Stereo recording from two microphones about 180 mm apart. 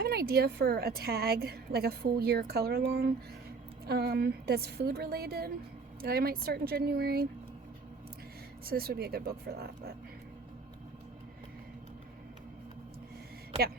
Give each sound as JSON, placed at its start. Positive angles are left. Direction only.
{"t": 0.0, "sound": "a woman's voice", "side_deg": -60}
{"t": 8.6, "sound": "a woman's voice", "side_deg": -55}